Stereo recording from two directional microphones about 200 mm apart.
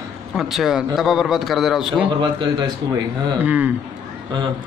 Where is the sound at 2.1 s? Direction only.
25° right (ahead or behind).